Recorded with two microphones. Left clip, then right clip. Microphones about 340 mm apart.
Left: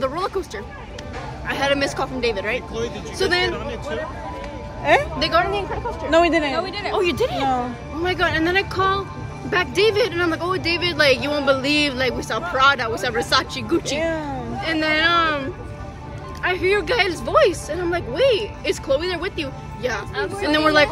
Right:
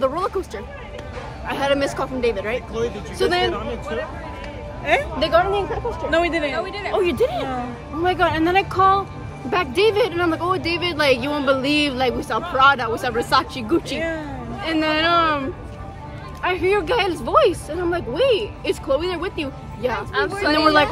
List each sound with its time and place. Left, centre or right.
0.0 s speech: centre
1.5 s speech: centre
5.2 s speech: centre
6.0 s speech: centre
6.5 s speech: left
6.9 s speech: centre
8.0 s speech: centre
13.9 s speech: centre
14.6 s speech: centre
16.4 s speech: centre
20.2 s speech: right
20.5 s speech: centre